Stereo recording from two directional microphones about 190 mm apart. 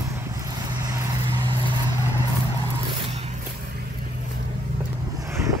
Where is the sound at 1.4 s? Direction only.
25° right (ahead or behind).